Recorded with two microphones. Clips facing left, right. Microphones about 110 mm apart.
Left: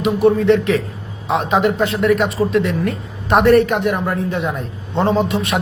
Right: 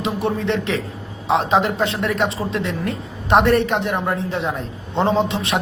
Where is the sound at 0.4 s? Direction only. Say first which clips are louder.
Left 7 dB; 30° right (ahead or behind).